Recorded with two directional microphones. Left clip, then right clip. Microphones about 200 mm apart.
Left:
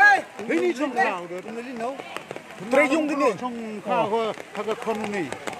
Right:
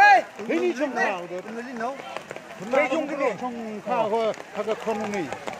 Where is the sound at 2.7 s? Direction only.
55° left (ahead or behind).